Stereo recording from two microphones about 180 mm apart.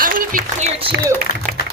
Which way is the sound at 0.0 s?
50° right (ahead or behind).